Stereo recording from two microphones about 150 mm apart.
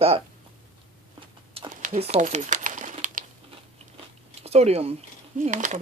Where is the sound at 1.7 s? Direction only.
60° right (ahead or behind).